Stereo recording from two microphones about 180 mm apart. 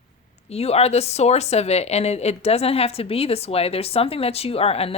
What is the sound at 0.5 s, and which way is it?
Speech, 35° left (ahead or behind).